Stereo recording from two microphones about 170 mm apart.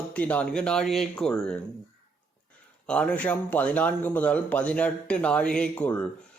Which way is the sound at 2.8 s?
5° left (ahead or behind).